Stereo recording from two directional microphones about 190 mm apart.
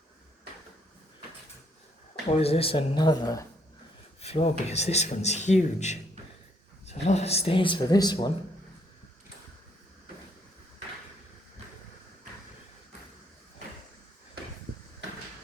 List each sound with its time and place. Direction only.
2.3 s speech: 30° left (ahead or behind)
4.2 s a sound: 30° left (ahead or behind)
4.6 s speech: 35° left (ahead or behind)